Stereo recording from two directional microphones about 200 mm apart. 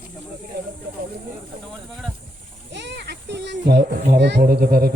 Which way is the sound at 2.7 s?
60° right (ahead or behind).